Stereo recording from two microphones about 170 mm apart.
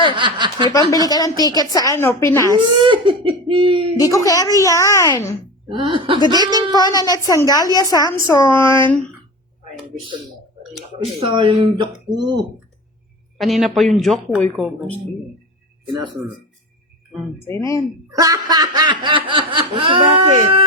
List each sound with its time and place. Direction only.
0.2 s snicker: 30° right (ahead or behind)
0.7 s a woman's voice: 20° left (ahead or behind)
2.6 s snicker: 30° right (ahead or behind)
4.0 s a woman's voice: 20° left (ahead or behind)
5.6 s snicker: 30° right (ahead or behind)
6.7 s a woman's voice: 25° left (ahead or behind)
11.3 s snicker: 30° right (ahead or behind)
13.4 s speech: centre (ahead or behind)
15.9 s snicker: 25° right (ahead or behind)
17.5 s speech: 20° left (ahead or behind)
18.1 s snicker: 20° right (ahead or behind)